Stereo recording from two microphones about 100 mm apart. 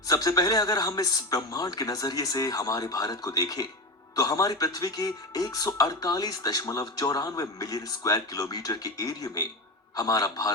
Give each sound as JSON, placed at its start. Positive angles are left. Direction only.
{"t": 0.1, "sound": "speech", "side_deg": 40}